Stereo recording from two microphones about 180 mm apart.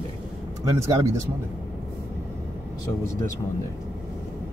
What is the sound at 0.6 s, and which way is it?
Speech, 20° right (ahead or behind).